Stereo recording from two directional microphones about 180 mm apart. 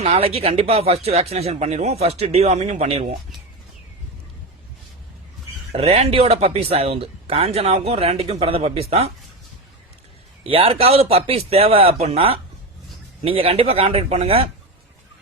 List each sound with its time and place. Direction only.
0.0 s speech: 35° right (ahead or behind)
5.7 s speech: 35° right (ahead or behind)
10.4 s speech: 30° right (ahead or behind)